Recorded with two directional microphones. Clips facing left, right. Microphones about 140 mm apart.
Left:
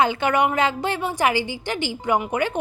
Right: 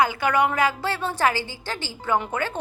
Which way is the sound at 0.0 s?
25° left (ahead or behind).